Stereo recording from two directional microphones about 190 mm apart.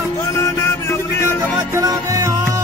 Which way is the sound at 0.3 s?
15° left (ahead or behind).